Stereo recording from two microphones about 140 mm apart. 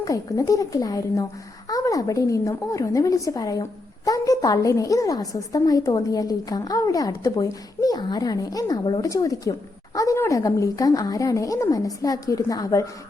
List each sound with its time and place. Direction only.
0.0 s a woman's voice: 25° left (ahead or behind)